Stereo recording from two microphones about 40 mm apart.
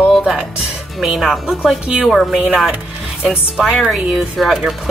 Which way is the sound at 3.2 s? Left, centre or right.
Centre.